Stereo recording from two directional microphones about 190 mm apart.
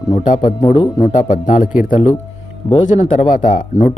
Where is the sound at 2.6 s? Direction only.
30° left (ahead or behind).